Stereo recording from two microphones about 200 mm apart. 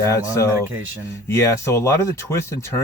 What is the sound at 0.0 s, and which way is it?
Speech, 15° left (ahead or behind).